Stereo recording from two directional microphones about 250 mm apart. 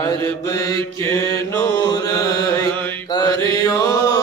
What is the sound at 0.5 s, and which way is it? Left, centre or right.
Mantra, centre.